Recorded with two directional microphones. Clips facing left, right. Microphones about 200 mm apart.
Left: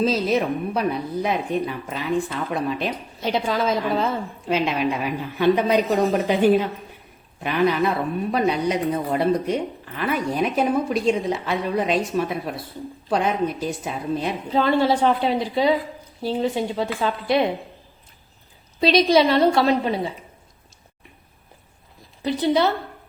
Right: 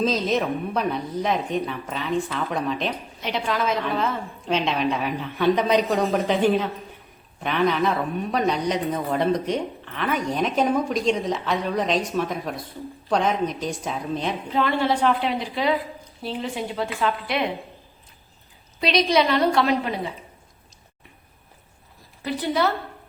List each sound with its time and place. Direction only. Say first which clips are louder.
0.0 s speech: left 2 dB; 10° left (ahead or behind)
3.2 s a woman's voice: left 4 dB; 30° left (ahead or behind)
4.4 s speech: left 1 dB; 5° left (ahead or behind)
14.5 s a woman's voice: left 4 dB; 35° left (ahead or behind)
18.8 s a woman's voice: left 4 dB; 30° left (ahead or behind)
22.2 s a woman's voice: left 4 dB; 25° left (ahead or behind)